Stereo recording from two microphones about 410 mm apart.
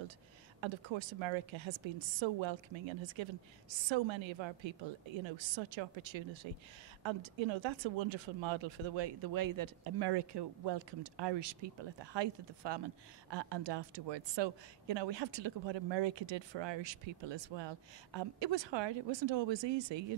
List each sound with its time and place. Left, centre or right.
0.6 s speech: right
9.3 s speech: right